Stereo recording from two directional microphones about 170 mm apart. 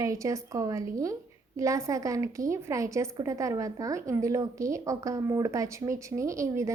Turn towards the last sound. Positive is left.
turn(degrees=-20)  # may be behind; listen again after turning